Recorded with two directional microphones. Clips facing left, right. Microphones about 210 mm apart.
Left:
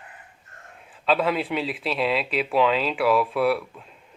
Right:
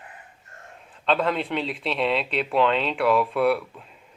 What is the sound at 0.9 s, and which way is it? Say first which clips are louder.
Speech: left 1 dB; 5° left (ahead or behind).